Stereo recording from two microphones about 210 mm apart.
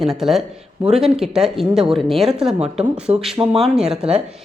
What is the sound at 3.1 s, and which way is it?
Speech, 30° right (ahead or behind).